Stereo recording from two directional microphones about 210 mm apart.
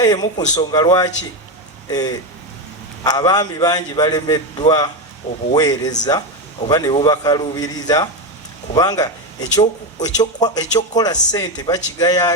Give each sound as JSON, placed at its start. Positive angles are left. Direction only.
{"t": 0.0, "sound": "a man's voice", "side_deg": 20}